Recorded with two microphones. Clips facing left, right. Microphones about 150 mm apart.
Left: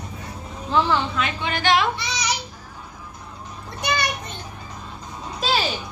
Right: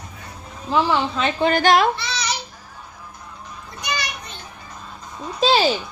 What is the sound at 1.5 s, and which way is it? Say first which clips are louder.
Speech: right 4 dB; 40° right (ahead or behind).